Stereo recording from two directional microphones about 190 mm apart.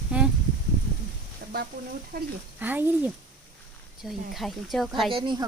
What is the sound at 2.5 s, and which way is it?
Speech, 10° right (ahead or behind).